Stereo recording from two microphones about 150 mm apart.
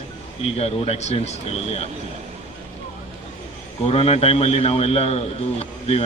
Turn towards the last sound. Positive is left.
turn(degrees=45)  # may be behind; listen again after turning